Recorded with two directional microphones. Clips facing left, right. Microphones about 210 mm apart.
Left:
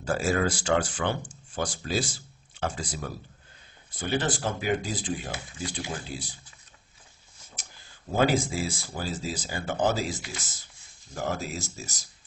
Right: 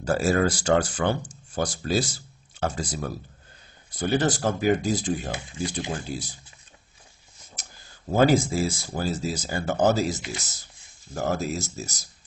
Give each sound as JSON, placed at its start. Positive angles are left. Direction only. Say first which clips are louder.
{"t": 0.0, "sound": "speech", "louder": "right 4 dB", "side_deg": -40}
{"t": 8.2, "sound": "speech", "louder": "right 5 dB", "side_deg": -45}